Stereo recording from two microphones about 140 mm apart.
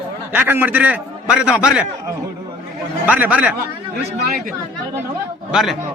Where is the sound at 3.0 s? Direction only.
10° right (ahead or behind).